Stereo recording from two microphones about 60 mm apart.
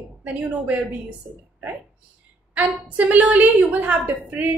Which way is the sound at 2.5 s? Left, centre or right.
Right.